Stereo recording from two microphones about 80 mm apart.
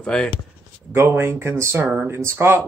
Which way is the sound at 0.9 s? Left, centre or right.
Right.